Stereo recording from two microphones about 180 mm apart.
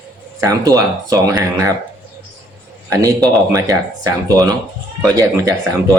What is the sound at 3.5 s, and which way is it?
Speech, 20° right (ahead or behind).